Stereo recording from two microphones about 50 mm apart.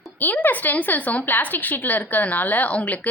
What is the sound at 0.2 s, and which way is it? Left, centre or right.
A woman's voice, left.